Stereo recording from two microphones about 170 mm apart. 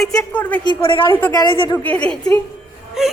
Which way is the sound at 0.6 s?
30° left (ahead or behind).